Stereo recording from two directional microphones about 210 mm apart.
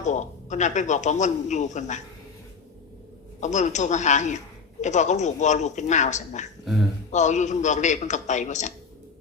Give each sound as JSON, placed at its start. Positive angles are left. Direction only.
{"t": 0.0, "sound": "a man's voice", "side_deg": 35}
{"t": 3.4, "sound": "a man's voice", "side_deg": 35}